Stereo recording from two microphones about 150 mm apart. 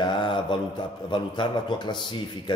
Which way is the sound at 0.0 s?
30° left (ahead or behind).